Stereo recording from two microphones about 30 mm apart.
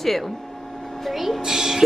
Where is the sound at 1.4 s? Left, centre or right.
Centre.